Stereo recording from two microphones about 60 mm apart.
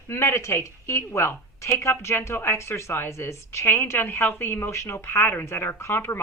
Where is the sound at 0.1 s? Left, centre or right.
Left.